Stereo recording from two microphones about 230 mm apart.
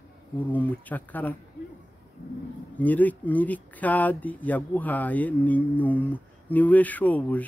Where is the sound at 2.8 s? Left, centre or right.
Centre.